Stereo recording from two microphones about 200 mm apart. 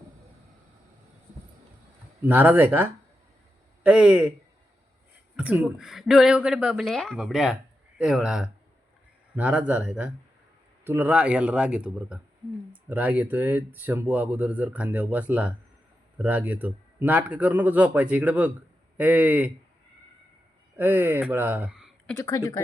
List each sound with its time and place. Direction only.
2.2 s speech: 10° right (ahead or behind)
5.4 s speech: 5° right (ahead or behind)
20.7 s speech: 10° right (ahead or behind)
22.2 s a woman's voice: 15° left (ahead or behind)